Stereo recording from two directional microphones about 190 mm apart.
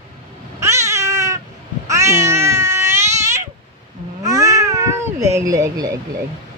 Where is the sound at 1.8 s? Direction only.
15° right (ahead or behind).